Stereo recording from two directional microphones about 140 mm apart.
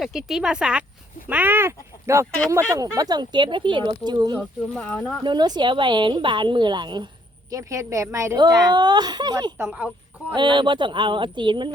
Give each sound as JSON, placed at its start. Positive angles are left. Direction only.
{"t": 0.0, "sound": "speech", "side_deg": -5}
{"t": 4.4, "sound": "speech", "side_deg": 10}
{"t": 5.2, "sound": "speech", "side_deg": -30}
{"t": 7.5, "sound": "speech", "side_deg": -20}
{"t": 9.6, "sound": "speech", "side_deg": -10}
{"t": 10.3, "sound": "speech", "side_deg": -35}